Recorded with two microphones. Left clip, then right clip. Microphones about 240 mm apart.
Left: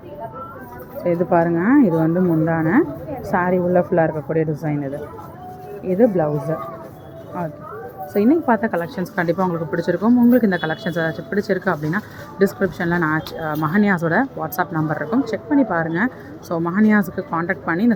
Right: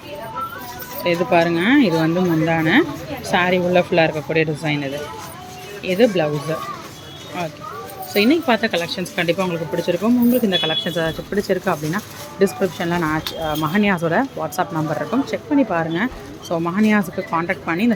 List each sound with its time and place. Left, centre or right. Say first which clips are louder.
1.0 s speech: right 1 dB; centre
8.1 s speech: right 1 dB; centre
9.8 s speech: left 2 dB; centre